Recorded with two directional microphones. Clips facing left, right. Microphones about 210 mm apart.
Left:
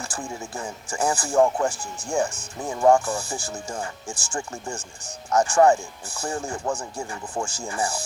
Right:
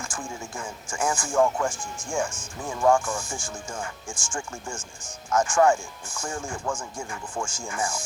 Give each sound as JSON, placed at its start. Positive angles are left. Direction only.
{"t": 0.0, "sound": "speech", "side_deg": 35}